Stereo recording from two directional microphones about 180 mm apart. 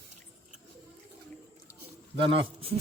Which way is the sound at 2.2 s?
30° right (ahead or behind).